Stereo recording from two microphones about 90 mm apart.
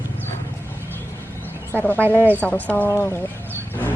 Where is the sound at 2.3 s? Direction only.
15° left (ahead or behind).